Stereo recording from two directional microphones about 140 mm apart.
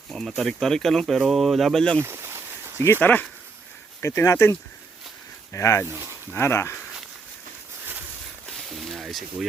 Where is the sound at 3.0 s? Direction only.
15° left (ahead or behind).